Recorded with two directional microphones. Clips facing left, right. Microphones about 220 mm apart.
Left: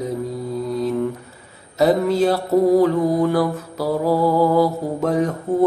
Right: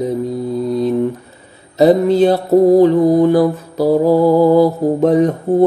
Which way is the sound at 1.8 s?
20° right (ahead or behind).